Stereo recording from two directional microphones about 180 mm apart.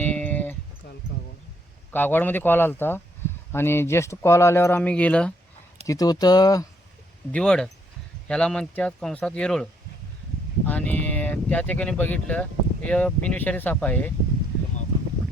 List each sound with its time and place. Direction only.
0.0 s a sound: 10° left (ahead or behind)
1.9 s speech: 10° left (ahead or behind)
5.8 s speech: 20° left (ahead or behind)
7.3 s speech: 5° left (ahead or behind)
10.7 s speech: 10° left (ahead or behind)